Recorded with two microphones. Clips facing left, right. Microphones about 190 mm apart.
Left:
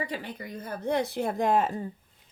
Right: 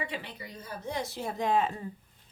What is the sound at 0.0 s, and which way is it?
Speech, 45° left (ahead or behind).